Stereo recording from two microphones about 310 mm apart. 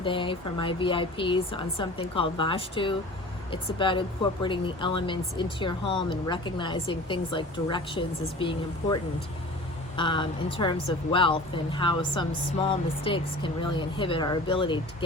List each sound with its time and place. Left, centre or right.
0.0 s speech: centre